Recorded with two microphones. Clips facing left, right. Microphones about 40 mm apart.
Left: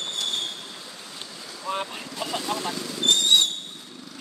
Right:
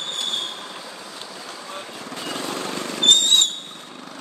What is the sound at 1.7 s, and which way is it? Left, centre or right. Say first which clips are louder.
Boat: left 9 dB; left.